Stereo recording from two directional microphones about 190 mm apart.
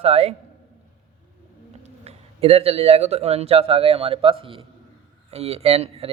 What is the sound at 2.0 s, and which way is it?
Speech, 30° right (ahead or behind).